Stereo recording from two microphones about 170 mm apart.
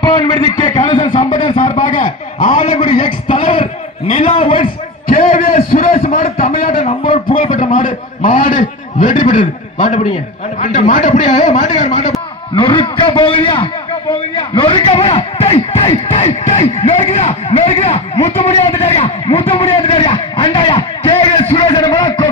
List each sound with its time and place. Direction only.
0.0 s a man's voice: 25° left (ahead or behind)
1.8 s a man's voice: 50° left (ahead or behind)
3.3 s a man's voice: 25° left (ahead or behind)
5.1 s a sound: 55° left (ahead or behind)
10.6 s a man's voice: 50° left (ahead or behind)
12.5 s a man's voice: 30° left (ahead or behind)
14.5 s a sound: 30° left (ahead or behind)